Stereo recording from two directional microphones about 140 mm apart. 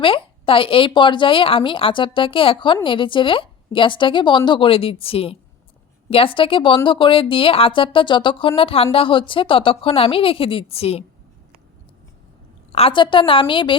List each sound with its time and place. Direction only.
0.0 s speech: 40° left (ahead or behind)
12.7 s speech: 40° left (ahead or behind)